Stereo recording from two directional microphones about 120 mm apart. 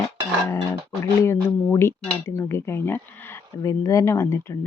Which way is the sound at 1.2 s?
25° left (ahead or behind).